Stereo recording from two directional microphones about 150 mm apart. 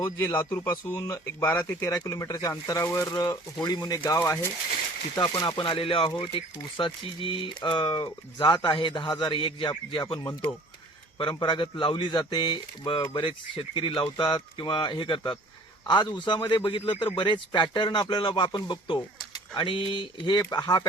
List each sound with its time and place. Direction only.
0.2 s speech: 15° left (ahead or behind)
11.2 s speech: 30° left (ahead or behind)